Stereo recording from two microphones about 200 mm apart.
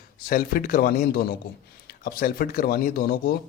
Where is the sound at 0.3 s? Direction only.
45° left (ahead or behind).